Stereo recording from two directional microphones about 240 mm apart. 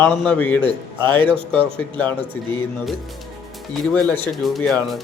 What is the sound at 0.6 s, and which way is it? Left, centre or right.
Speech, centre.